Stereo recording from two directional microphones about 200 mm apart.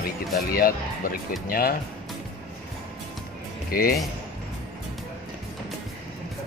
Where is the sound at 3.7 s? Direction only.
45° left (ahead or behind).